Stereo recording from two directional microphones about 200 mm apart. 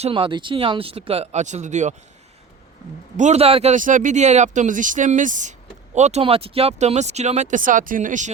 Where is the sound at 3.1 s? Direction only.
35° right (ahead or behind).